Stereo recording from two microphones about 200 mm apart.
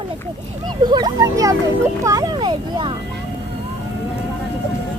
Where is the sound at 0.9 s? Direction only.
20° right (ahead or behind).